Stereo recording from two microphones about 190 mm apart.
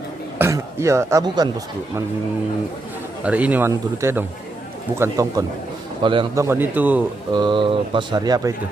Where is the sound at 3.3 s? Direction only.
5° right (ahead or behind).